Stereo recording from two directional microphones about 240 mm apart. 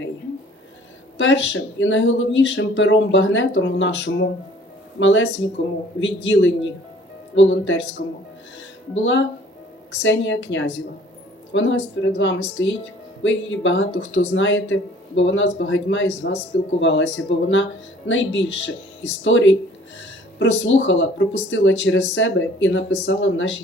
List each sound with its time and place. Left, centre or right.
1.2 s speech: left
9.0 s speech: left